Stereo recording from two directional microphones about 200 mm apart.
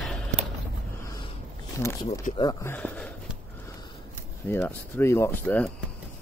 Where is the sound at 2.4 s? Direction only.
15° left (ahead or behind).